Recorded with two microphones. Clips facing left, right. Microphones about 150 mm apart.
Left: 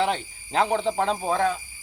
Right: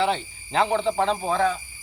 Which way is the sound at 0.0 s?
40° left (ahead or behind).